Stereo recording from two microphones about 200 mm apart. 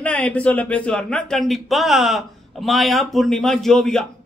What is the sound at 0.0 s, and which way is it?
Speech, 5° left (ahead or behind).